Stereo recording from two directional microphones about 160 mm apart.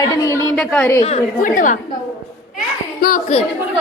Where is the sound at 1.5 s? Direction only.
55° left (ahead or behind).